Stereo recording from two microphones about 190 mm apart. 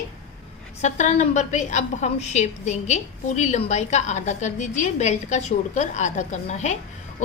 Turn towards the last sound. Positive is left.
turn(degrees=35)  # may be behind; listen again after turning